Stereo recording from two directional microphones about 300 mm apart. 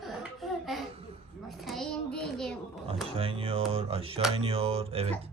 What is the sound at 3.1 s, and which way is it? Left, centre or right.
Speech, centre.